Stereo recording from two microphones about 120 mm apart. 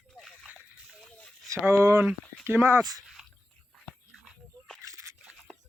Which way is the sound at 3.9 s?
5° right (ahead or behind).